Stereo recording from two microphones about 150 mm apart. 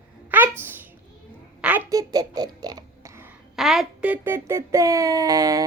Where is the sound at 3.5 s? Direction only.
Centre (ahead or behind).